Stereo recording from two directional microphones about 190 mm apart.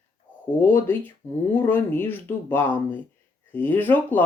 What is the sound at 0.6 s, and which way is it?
Speech, 10° left (ahead or behind).